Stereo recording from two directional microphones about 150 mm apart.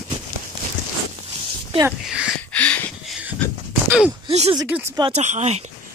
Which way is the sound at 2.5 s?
10° left (ahead or behind).